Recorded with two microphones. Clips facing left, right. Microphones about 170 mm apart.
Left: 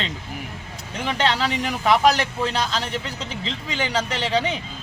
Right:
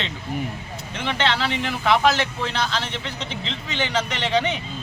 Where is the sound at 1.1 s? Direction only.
40° left (ahead or behind).